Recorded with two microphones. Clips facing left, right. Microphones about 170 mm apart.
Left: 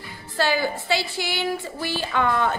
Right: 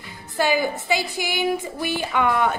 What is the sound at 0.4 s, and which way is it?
A woman's voice, 15° right (ahead or behind).